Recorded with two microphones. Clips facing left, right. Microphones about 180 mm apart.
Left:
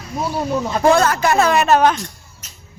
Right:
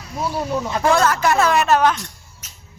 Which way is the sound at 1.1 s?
10° left (ahead or behind).